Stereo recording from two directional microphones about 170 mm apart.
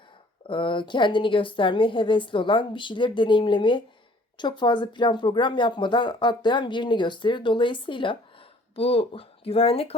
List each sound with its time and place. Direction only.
0.4 s speech: 30° left (ahead or behind)